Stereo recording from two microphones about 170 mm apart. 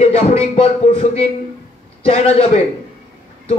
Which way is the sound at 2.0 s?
35° left (ahead or behind).